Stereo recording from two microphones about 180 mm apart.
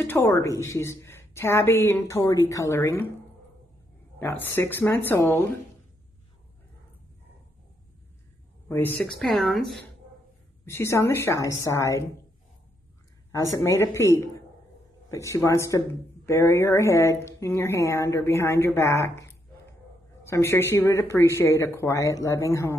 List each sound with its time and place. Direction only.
0.0 s speech: 10° left (ahead or behind)
4.2 s speech: 10° left (ahead or behind)
8.6 s a woman's voice: 10° left (ahead or behind)
10.6 s speech: 15° left (ahead or behind)
13.3 s speech: 15° left (ahead or behind)